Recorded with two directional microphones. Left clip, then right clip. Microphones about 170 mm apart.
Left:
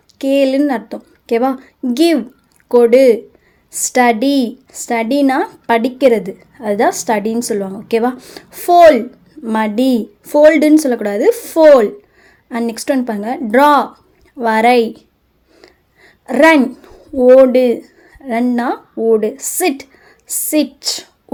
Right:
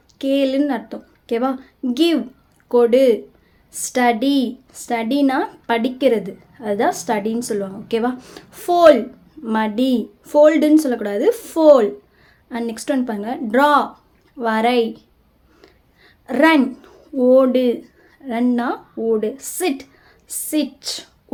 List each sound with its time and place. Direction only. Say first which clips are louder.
0.2 s a woman's voice: left 5 dB; 35° left (ahead or behind)
15.6 s a sound: left 5 dB; 40° left (ahead or behind)
18.2 s speech: left 4 dB; 35° left (ahead or behind)